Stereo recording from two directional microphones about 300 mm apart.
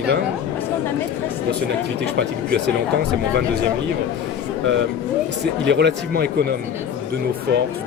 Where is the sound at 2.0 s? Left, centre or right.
Right.